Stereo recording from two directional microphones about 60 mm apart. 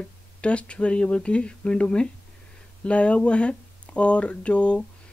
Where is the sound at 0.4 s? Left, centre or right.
Centre.